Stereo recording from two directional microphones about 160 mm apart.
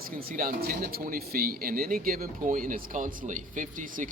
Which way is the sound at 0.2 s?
65° right (ahead or behind).